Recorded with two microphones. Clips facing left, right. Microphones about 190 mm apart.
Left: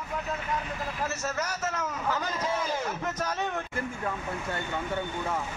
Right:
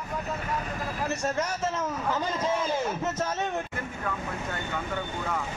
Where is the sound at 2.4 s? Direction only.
10° left (ahead or behind).